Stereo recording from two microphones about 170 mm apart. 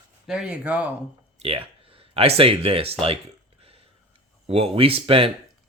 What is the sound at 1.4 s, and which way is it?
Speech, 35° right (ahead or behind).